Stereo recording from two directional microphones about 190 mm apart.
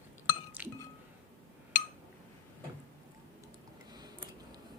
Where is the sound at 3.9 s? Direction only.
20° right (ahead or behind).